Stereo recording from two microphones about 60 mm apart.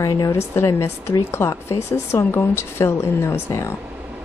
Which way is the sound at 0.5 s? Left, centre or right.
Left.